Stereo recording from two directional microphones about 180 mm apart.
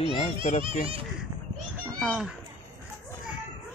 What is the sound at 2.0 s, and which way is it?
Speech, centre (ahead or behind).